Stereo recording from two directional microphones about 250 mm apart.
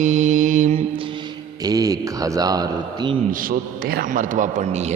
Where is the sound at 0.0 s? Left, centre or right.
Right.